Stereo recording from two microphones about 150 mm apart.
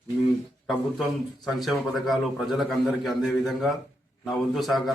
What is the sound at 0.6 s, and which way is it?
A man's voice, centre (ahead or behind).